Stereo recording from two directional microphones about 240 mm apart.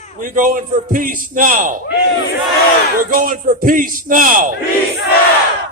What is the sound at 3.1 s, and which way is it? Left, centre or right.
A man's voice, right.